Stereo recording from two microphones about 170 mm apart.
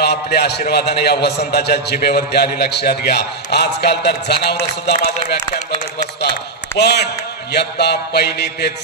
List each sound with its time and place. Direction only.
0.0 s a man's voice: 75° left (ahead or behind)
6.8 s a man's voice: 75° left (ahead or behind)